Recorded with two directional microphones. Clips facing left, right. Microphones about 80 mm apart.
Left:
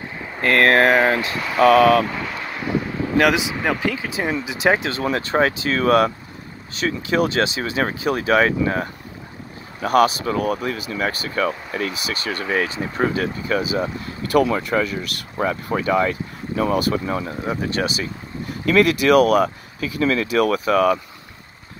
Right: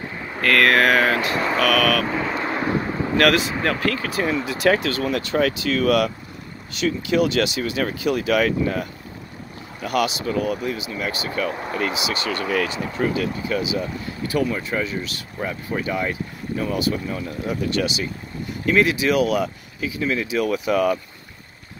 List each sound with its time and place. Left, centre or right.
0.4 s a sound: left
1.3 s vehicle: right
1.6 s speech: left
2.0 s vehicle: centre
2.4 s vehicle: right
3.2 s speech: centre
5.0 s speech: left
12.9 s speech: left
14.3 s speech: left
17.3 s speech: left
18.7 s speech: left
20.0 s speech: left